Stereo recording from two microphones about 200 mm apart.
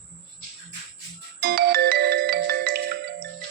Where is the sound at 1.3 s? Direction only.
50° right (ahead or behind).